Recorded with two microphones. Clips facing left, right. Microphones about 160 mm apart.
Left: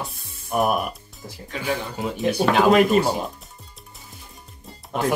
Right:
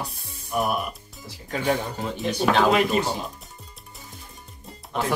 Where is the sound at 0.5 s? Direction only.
50° left (ahead or behind).